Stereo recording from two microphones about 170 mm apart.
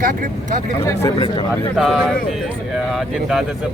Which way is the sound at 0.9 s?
20° left (ahead or behind).